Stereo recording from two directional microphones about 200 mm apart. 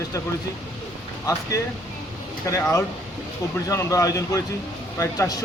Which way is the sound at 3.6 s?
15° left (ahead or behind).